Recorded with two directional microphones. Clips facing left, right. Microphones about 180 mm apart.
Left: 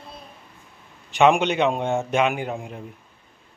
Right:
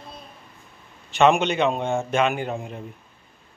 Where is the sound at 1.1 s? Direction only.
15° left (ahead or behind).